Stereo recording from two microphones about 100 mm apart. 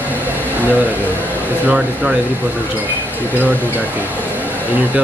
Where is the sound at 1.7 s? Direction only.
10° right (ahead or behind).